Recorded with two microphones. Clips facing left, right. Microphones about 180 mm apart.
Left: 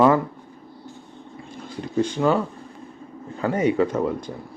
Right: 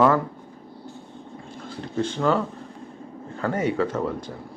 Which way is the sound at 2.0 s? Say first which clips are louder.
Left 2 dB; 15° left (ahead or behind).